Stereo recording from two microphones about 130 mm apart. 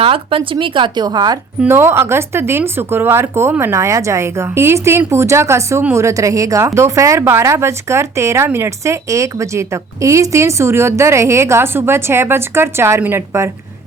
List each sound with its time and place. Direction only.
0.0 s speech: 45° right (ahead or behind)
1.6 s speech: 20° right (ahead or behind)